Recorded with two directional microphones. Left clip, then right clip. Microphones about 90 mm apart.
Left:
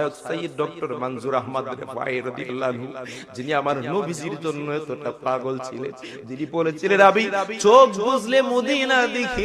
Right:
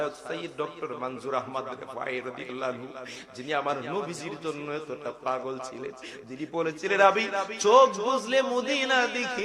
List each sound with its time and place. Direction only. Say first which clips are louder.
0.0 s a man's voice: left 6 dB; 45° left (ahead or behind)